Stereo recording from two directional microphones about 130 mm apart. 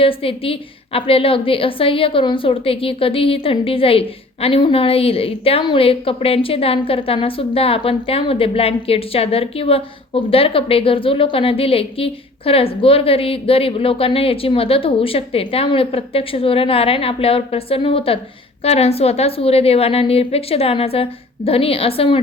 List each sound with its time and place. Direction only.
0.0 s a woman's voice: 45° left (ahead or behind)